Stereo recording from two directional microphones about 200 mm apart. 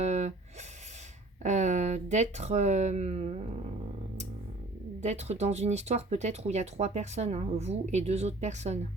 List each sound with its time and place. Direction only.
0.0 s speech: 35° right (ahead or behind)
1.4 s speech: 35° right (ahead or behind)
4.9 s speech: 35° right (ahead or behind)